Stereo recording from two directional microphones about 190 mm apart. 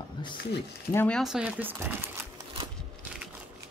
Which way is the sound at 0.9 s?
5° left (ahead or behind).